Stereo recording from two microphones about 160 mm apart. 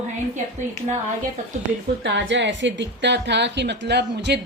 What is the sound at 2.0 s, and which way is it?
A woman's voice, 90° right.